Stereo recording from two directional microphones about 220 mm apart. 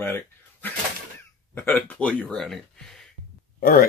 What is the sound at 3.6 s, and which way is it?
Speech, 40° left (ahead or behind).